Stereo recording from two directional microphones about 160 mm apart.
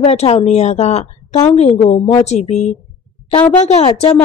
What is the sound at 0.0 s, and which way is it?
A woman's voice, 40° left (ahead or behind).